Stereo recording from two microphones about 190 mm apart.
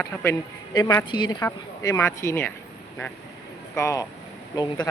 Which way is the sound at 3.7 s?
15° left (ahead or behind).